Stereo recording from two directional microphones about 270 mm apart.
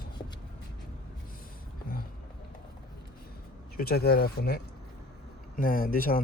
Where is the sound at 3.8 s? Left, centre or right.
Left.